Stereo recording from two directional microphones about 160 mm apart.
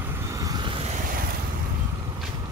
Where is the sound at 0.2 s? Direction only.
20° right (ahead or behind).